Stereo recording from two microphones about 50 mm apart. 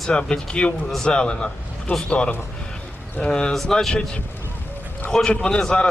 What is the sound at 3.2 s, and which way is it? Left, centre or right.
Speech, centre.